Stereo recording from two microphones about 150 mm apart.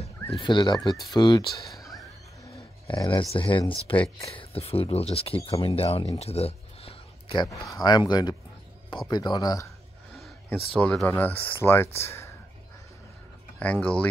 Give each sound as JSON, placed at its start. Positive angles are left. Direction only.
{"t": 0.3, "sound": "speech", "side_deg": 30}
{"t": 1.8, "sound": "a sound", "side_deg": 0}
{"t": 2.9, "sound": "speech", "side_deg": 30}
{"t": 6.1, "sound": "a sound", "side_deg": 45}
{"t": 7.4, "sound": "speech", "side_deg": 20}
{"t": 10.5, "sound": "speech", "side_deg": 5}
{"t": 13.6, "sound": "speech", "side_deg": 10}